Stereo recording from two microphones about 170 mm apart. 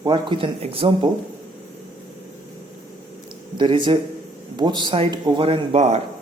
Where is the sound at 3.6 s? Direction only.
25° right (ahead or behind).